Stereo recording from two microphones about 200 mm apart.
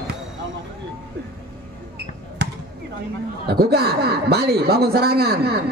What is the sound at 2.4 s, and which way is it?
Basketball bounce, 55° right (ahead or behind).